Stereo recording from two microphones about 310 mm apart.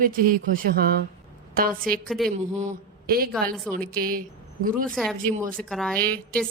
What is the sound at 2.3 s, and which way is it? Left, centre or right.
A man's voice, right.